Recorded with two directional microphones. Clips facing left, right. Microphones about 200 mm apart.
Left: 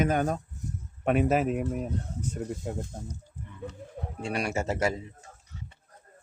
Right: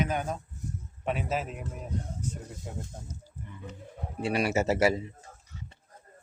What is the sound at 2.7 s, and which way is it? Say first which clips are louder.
Speech: left 2 dB; 60° left (ahead or behind).